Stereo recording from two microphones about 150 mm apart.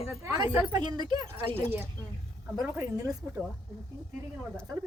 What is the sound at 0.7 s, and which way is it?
Speech, 30° right (ahead or behind).